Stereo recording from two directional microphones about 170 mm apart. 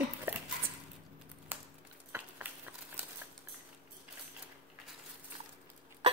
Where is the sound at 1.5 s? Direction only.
10° right (ahead or behind).